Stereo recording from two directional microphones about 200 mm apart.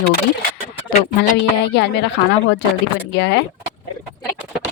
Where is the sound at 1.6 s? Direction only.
60° left (ahead or behind).